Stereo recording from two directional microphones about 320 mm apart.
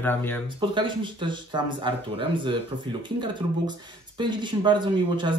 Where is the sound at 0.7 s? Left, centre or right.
Centre.